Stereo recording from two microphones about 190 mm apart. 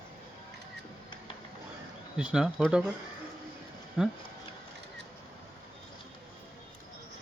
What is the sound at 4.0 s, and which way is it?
Speech, 5° right (ahead or behind).